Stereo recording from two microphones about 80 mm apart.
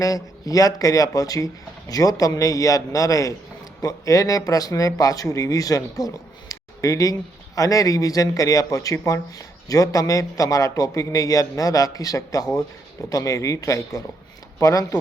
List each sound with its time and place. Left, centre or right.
0.0 s speech: left